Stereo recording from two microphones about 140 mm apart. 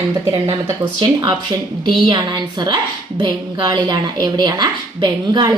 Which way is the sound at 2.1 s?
30° right (ahead or behind).